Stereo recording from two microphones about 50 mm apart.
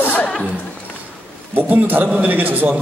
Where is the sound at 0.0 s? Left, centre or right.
Left.